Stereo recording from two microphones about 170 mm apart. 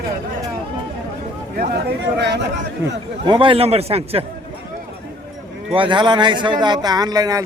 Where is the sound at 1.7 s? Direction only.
75° right (ahead or behind).